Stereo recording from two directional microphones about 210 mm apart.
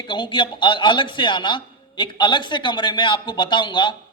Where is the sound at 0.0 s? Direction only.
20° left (ahead or behind).